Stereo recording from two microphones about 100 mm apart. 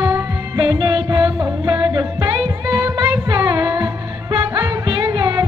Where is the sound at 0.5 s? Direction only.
45° right (ahead or behind).